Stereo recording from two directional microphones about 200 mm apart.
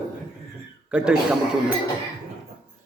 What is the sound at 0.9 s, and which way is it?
Speech, 5° right (ahead or behind).